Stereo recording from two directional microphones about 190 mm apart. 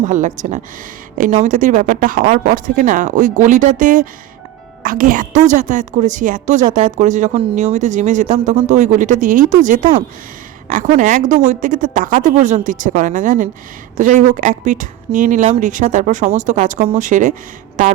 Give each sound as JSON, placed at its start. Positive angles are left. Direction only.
{"t": 0.0, "sound": "speech", "side_deg": -40}